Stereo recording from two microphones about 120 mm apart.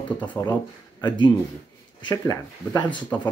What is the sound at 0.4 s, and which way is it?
Speech, 20° left (ahead or behind).